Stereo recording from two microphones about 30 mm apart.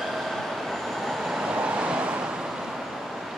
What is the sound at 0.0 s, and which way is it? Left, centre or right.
Train, centre.